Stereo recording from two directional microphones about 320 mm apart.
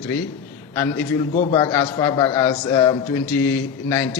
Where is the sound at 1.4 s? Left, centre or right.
Centre.